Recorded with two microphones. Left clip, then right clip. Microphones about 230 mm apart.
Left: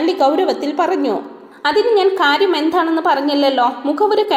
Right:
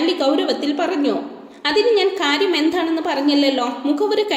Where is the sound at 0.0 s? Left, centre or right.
Left.